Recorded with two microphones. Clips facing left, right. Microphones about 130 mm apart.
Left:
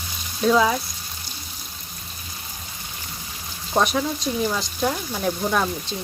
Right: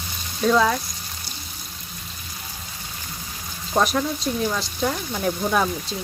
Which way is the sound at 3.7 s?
Centre (ahead or behind).